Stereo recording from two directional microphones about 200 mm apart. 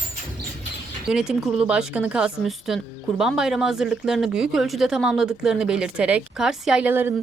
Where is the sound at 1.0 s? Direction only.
5° right (ahead or behind).